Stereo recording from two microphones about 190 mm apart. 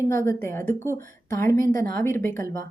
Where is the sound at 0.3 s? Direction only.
10° left (ahead or behind).